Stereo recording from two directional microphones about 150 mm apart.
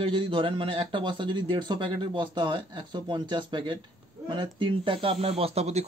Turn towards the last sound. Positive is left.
turn(degrees=-45)  # may be behind; listen again after turning